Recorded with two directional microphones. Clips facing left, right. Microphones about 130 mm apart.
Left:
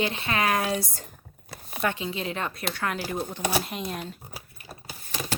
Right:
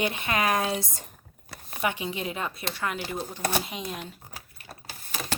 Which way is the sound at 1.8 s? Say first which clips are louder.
Left 1 dB; 15° right (ahead or behind).